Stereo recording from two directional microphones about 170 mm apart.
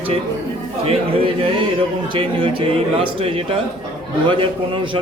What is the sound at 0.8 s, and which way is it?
A man's voice, 35° right (ahead or behind).